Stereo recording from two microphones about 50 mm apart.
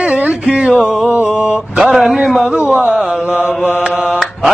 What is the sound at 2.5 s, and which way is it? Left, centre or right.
Speech, centre.